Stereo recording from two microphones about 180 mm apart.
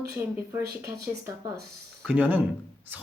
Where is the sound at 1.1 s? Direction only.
10° right (ahead or behind).